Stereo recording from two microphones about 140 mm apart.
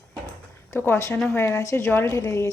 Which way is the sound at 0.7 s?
15° left (ahead or behind).